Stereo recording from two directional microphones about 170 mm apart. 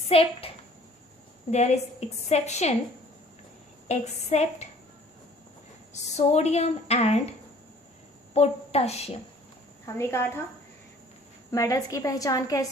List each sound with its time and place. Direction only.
0.1 s a child's voice: 35° left (ahead or behind)
3.8 s speech: 40° left (ahead or behind)
5.9 s a woman's voice: 40° left (ahead or behind)
9.8 s a woman's voice: 15° left (ahead or behind)
11.5 s a woman's voice: 20° left (ahead or behind)